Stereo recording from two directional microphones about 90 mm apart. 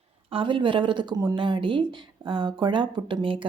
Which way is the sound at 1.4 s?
65° right (ahead or behind).